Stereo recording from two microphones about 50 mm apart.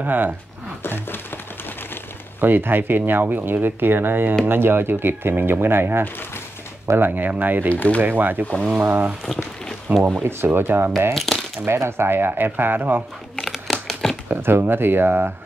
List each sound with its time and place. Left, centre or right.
0.0 s speech: right
0.8 s a sound: left
2.4 s speech: right
7.0 s speech: right
7.7 s speech: left
8.0 s speech: right
11.1 s coin: centre
11.6 s speech: right
13.5 s crumpling: centre
14.3 s speech: right